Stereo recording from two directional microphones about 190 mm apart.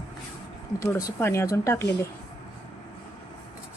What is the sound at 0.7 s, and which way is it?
Speech, 15° left (ahead or behind).